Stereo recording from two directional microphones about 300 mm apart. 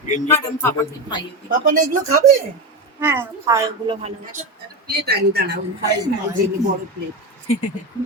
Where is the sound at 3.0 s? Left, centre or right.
Centre.